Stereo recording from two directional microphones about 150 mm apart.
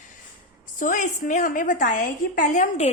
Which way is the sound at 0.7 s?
60° left (ahead or behind).